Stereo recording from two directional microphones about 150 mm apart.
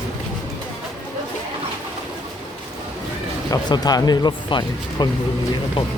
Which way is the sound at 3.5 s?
25° left (ahead or behind).